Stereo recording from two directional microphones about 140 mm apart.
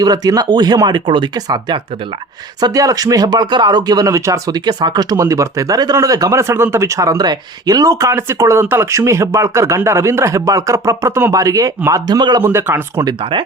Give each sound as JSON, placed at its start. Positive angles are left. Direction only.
{"t": 0.0, "sound": "speech", "side_deg": -25}
{"t": 12.5, "sound": "speech", "side_deg": -15}